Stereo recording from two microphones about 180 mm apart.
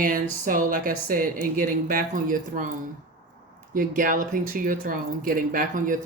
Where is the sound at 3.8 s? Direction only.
50° right (ahead or behind).